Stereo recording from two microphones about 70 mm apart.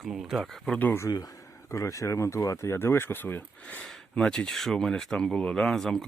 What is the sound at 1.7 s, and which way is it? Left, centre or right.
Speech, left.